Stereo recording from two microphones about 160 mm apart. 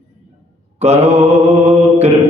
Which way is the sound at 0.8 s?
40° right (ahead or behind).